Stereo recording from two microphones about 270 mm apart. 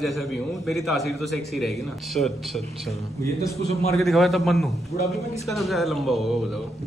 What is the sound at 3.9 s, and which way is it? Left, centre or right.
A man's voice, centre.